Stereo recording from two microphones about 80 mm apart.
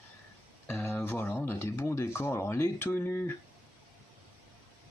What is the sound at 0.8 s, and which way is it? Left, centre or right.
Speech, left.